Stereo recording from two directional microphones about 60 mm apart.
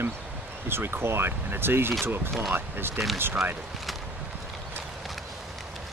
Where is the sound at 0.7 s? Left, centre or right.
Right.